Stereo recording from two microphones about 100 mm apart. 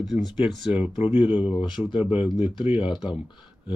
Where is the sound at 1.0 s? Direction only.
10° right (ahead or behind).